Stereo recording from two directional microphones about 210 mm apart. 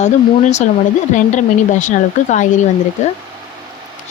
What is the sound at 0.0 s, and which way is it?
Speech, 35° left (ahead or behind).